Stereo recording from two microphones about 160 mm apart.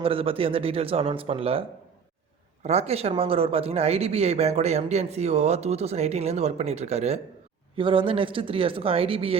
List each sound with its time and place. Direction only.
0.0 s speech: 35° right (ahead or behind)
2.6 s speech: 40° right (ahead or behind)